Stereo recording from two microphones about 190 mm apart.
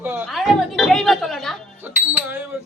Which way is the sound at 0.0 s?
10° right (ahead or behind).